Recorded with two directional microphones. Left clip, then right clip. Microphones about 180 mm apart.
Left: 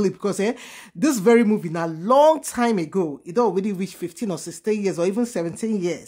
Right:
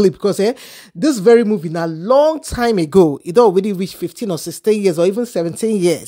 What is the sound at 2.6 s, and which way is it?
Speech, 35° right (ahead or behind).